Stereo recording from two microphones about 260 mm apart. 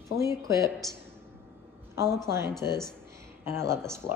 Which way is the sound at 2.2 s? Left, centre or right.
Centre.